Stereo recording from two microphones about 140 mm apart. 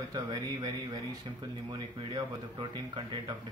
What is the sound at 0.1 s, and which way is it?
Speech, 30° right (ahead or behind).